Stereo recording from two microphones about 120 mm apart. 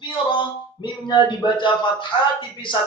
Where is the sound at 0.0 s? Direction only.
40° left (ahead or behind).